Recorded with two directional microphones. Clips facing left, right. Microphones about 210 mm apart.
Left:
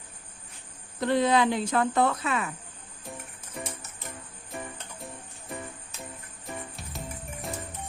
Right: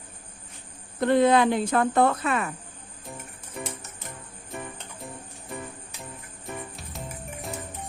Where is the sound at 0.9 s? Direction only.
55° right (ahead or behind).